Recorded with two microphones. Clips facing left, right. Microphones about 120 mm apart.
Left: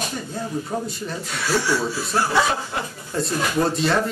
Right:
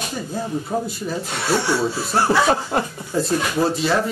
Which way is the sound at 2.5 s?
40° right (ahead or behind).